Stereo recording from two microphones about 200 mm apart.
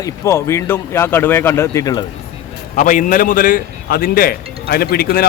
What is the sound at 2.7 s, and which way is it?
A man's voice, 40° left (ahead or behind).